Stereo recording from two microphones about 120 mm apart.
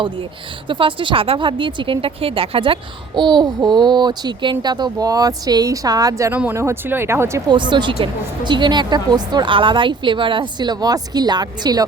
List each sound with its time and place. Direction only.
0.7 s speech: 45° right (ahead or behind)
3.2 s a woman's voice: 35° right (ahead or behind)
6.3 s speech: 15° right (ahead or behind)
7.5 s a woman's voice: 40° right (ahead or behind)